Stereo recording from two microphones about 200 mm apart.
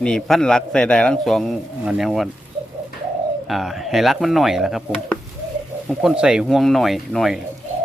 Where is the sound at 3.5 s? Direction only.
Centre (ahead or behind).